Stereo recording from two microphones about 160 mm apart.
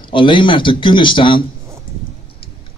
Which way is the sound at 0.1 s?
30° left (ahead or behind).